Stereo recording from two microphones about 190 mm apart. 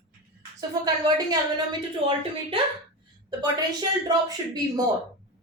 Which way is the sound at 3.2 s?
20° right (ahead or behind).